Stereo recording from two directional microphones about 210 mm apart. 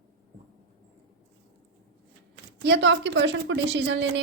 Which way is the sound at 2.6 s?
55° right (ahead or behind).